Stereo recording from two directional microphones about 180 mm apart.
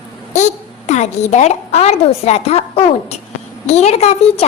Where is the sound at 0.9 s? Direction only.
40° left (ahead or behind).